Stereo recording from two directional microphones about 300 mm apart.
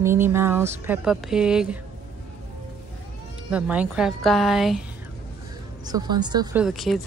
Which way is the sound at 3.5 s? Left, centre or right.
Centre.